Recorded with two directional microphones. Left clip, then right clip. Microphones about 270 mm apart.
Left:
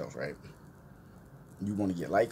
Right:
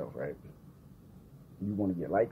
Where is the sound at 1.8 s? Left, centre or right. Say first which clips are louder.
Left 1 dB; centre.